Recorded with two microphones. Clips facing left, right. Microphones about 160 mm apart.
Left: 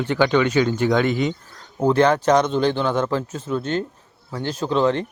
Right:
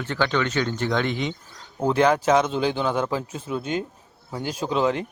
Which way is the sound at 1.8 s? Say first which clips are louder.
Left 3 dB; 5° right (ahead or behind).